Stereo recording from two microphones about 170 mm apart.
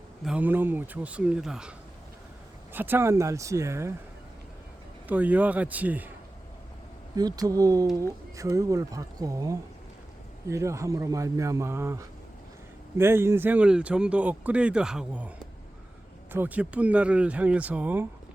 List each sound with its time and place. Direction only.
0.3 s speech: 10° right (ahead or behind)
2.7 s speech: 10° right (ahead or behind)
5.0 s speech: 10° right (ahead or behind)
7.2 s speech: 20° right (ahead or behind); by 15.3 s 5° right (ahead or behind)
16.3 s speech: 10° right (ahead or behind)